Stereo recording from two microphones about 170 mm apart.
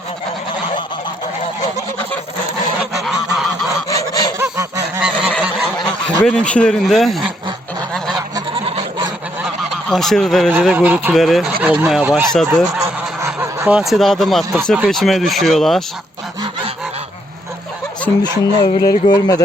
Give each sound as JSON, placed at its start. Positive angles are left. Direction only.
{"t": 3.8, "sound": "goose", "side_deg": 20}
{"t": 4.4, "sound": "honk", "side_deg": -15}
{"t": 4.9, "sound": "goose", "side_deg": -5}
{"t": 6.2, "sound": "speech", "side_deg": 5}
{"t": 8.1, "sound": "goose", "side_deg": -35}
{"t": 9.9, "sound": "speech", "side_deg": 0}
{"t": 12.8, "sound": "speech", "side_deg": -15}
{"t": 18.2, "sound": "speech", "side_deg": 25}